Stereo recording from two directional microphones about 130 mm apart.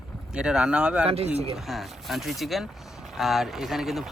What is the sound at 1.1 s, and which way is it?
Speech, 50° right (ahead or behind).